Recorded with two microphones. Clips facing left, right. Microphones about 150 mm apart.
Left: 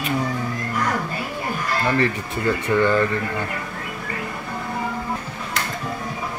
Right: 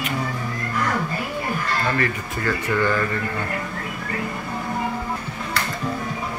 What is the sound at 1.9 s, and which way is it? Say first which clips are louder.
Speech: left 3 dB; 20° left (ahead or behind).